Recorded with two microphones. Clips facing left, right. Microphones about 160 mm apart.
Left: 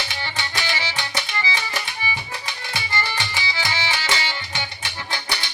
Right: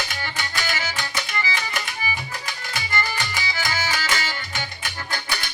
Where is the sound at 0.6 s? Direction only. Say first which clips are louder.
Even; 45° right (ahead or behind).